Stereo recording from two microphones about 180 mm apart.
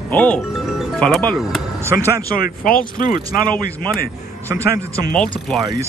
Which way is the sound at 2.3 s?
55° left (ahead or behind).